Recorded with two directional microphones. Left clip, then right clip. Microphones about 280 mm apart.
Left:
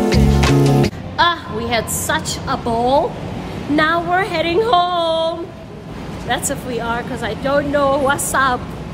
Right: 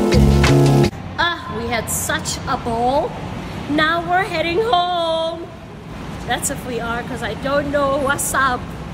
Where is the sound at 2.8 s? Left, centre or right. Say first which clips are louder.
Left 3 dB; centre.